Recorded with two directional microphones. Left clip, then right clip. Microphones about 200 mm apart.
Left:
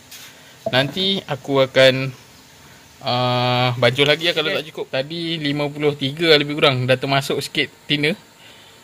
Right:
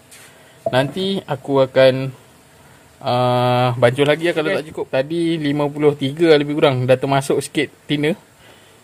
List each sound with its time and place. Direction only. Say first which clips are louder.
0.7 s speech: even; 25° right (ahead or behind)
3.0 s speech: right 3 dB; 30° right (ahead or behind)